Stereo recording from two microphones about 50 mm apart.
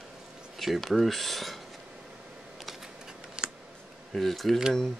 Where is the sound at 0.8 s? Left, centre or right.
Centre.